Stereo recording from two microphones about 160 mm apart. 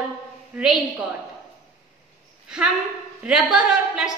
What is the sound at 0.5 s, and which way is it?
Speech, 5° right (ahead or behind).